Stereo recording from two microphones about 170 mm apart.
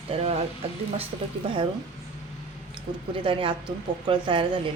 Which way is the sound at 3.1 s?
30° right (ahead or behind).